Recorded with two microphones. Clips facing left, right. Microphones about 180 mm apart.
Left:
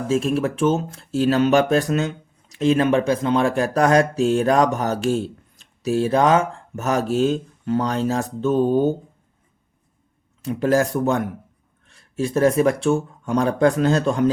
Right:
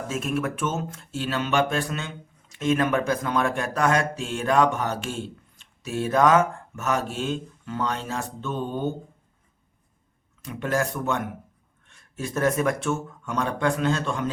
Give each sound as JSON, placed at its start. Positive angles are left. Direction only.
{"t": 0.1, "sound": "speech", "side_deg": 30}
{"t": 10.4, "sound": "speech", "side_deg": 35}